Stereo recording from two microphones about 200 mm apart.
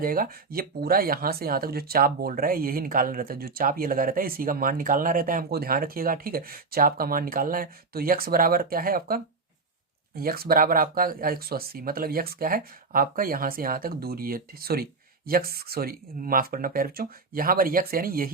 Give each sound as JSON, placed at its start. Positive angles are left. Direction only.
{"t": 0.0, "sound": "speech", "side_deg": -45}